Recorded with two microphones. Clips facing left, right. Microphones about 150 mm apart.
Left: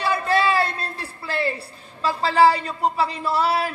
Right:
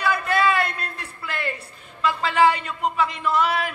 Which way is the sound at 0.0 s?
30° left (ahead or behind).